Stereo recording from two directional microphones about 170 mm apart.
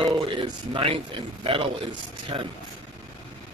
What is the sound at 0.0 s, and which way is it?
A man's voice, 30° right (ahead or behind).